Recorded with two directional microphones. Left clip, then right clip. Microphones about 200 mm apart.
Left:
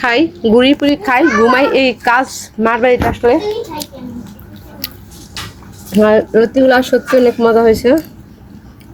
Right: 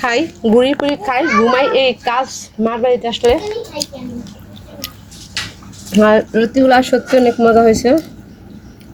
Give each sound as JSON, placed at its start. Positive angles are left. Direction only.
{"t": 0.0, "sound": "a child's voice", "side_deg": 0}
{"t": 4.8, "sound": "a sound", "side_deg": 5}
{"t": 5.9, "sound": "speech", "side_deg": -5}